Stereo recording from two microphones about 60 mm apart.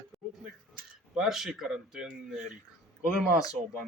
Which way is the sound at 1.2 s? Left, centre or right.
Centre.